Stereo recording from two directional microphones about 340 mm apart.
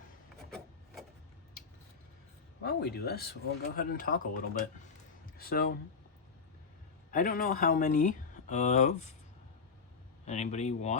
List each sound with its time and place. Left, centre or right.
2.6 s speech: left
7.1 s speech: left
10.2 s speech: centre